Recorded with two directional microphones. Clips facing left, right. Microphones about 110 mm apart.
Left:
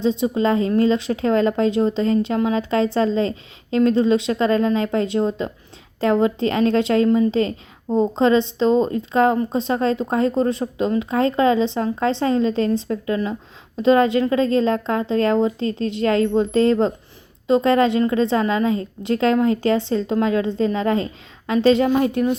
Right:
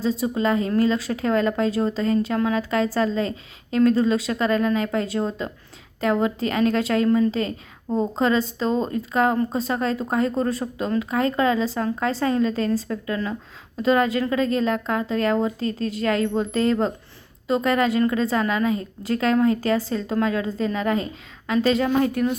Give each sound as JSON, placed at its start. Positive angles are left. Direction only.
{"t": 0.0, "sound": "speech", "side_deg": 25}